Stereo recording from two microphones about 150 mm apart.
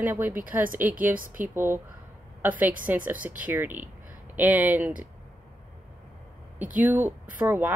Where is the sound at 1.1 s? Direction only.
65° right (ahead or behind).